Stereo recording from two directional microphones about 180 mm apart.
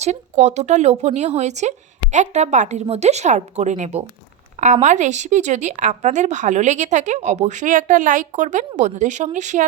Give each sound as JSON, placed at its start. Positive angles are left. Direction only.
{"t": 0.0, "sound": "speech", "side_deg": -40}